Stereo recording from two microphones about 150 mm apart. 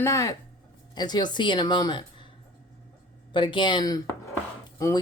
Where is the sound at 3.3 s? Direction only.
35° left (ahead or behind).